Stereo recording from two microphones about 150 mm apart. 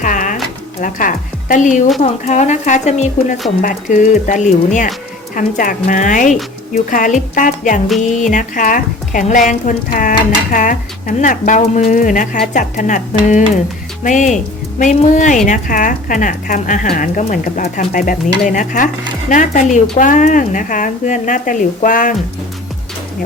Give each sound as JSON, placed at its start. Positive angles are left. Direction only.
{"t": 0.0, "sound": "a sound", "side_deg": 60}
{"t": 0.8, "sound": "speech", "side_deg": 60}
{"t": 17.2, "sound": "speech", "side_deg": 60}